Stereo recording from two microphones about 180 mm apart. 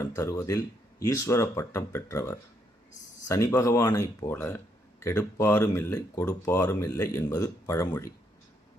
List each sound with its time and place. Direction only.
0.0 s speech: 15° left (ahead or behind)